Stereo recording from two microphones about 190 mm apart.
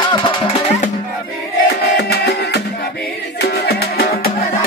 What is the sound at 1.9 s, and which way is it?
Music, 60° left (ahead or behind).